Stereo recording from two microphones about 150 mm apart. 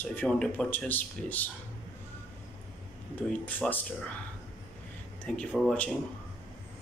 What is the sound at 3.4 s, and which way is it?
Speech, 10° left (ahead or behind).